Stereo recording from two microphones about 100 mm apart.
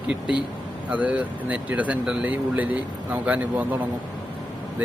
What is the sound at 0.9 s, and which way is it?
Speech, 15° right (ahead or behind).